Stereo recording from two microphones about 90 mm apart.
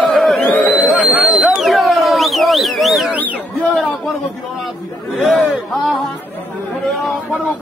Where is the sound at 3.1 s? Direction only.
15° right (ahead or behind).